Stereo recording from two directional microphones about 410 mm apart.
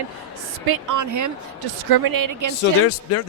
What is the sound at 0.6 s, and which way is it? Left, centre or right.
Speech, right.